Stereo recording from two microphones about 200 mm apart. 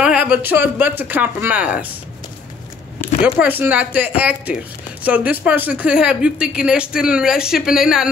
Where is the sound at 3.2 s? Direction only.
10° right (ahead or behind).